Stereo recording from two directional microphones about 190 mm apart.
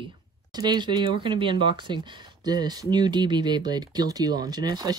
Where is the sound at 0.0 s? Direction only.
25° right (ahead or behind).